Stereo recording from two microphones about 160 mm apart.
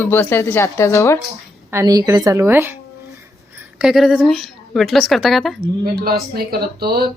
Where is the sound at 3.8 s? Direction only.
Centre (ahead or behind).